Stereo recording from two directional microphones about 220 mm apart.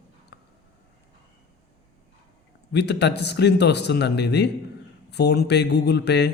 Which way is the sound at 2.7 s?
50° left (ahead or behind).